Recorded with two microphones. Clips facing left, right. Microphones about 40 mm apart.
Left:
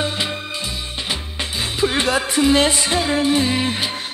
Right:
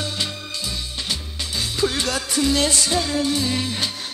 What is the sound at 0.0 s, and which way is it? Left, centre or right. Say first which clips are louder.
Music: left 5 dB; left.